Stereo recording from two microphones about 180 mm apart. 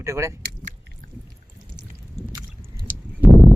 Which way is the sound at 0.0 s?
15° right (ahead or behind).